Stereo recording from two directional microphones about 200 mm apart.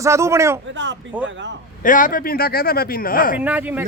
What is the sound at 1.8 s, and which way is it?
Speech, 40° left (ahead or behind).